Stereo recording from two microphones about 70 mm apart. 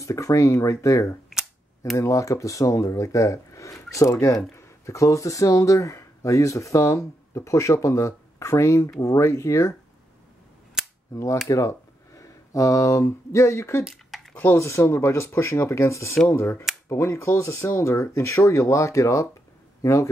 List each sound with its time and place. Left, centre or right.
0.0 s speech: left
11.4 s speech: left
13.8 s a sound: centre
14.3 s a man's voice: left